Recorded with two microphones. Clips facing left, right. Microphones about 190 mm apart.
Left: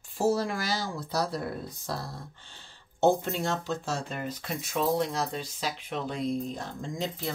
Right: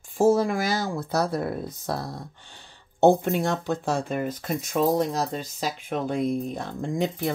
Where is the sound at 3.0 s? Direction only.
60° right (ahead or behind).